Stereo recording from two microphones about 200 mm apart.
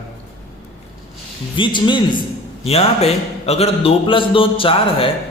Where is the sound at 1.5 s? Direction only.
25° left (ahead or behind).